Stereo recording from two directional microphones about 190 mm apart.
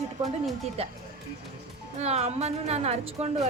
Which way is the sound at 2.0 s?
35° right (ahead or behind).